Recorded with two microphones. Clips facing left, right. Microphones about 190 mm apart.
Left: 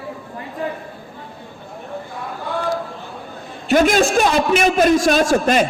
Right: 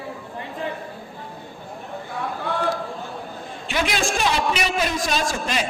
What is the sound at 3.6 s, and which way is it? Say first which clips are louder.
A man's voice: left 10 dB; 45° left (ahead or behind).